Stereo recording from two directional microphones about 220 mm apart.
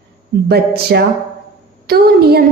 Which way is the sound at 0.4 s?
45° right (ahead or behind).